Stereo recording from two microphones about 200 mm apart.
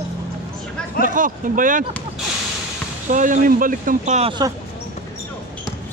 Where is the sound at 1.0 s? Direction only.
40° right (ahead or behind).